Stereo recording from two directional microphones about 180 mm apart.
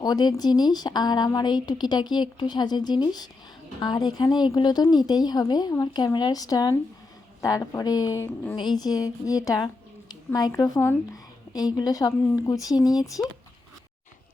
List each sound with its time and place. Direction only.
0.0 s a woman's voice: 25° left (ahead or behind)